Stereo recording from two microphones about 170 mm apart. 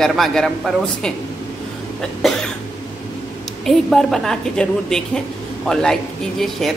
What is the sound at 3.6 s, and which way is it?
A man's voice, centre (ahead or behind).